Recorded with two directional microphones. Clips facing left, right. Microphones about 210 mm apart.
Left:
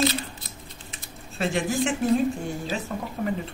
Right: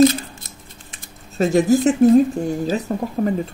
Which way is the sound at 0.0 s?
45° right (ahead or behind).